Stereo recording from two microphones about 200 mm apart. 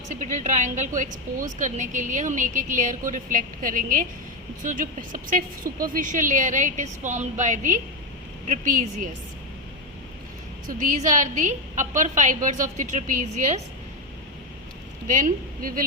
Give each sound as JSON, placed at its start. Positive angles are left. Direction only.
{"t": 0.1, "sound": "a woman's voice", "side_deg": -40}
{"t": 10.7, "sound": "a woman's voice", "side_deg": -40}
{"t": 15.0, "sound": "a woman's voice", "side_deg": -40}